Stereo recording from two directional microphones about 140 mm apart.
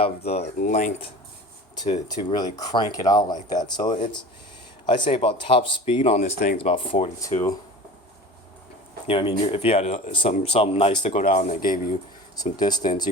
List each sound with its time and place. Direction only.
0.0 s speech: 50° left (ahead or behind)
0.6 s speech: 60° left (ahead or behind)
1.7 s speech: 30° left (ahead or behind)
6.0 s speech: 55° left (ahead or behind)
9.0 s speech: 40° left (ahead or behind)
11.1 s speech: 60° left (ahead or behind); by 11.9 s 75° left (ahead or behind)
12.4 s speech: 30° left (ahead or behind)